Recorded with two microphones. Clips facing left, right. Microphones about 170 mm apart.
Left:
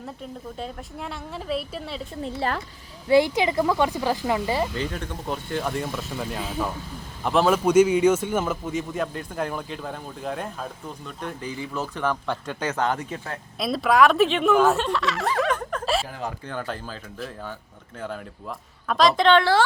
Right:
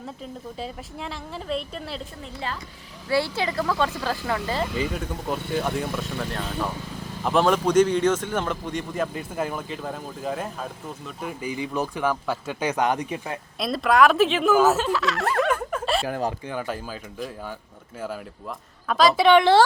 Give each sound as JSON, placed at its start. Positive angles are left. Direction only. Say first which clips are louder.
{"t": 0.6, "sound": "speech", "louder": "even", "side_deg": 0}
{"t": 3.1, "sound": "speech", "louder": "left 5 dB", "side_deg": 15}
{"t": 4.7, "sound": "speech", "louder": "right 2 dB", "side_deg": -5}
{"t": 13.6, "sound": "speech", "louder": "even", "side_deg": 0}